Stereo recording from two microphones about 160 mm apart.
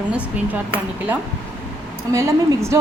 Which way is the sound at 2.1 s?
20° right (ahead or behind).